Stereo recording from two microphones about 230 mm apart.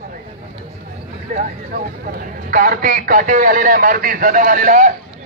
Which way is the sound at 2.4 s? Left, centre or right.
Right.